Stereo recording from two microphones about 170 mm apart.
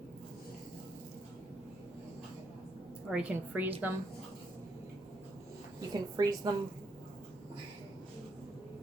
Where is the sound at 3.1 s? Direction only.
10° right (ahead or behind).